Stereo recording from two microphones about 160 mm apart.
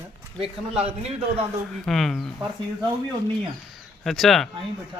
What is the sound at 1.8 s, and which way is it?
Speech, centre (ahead or behind).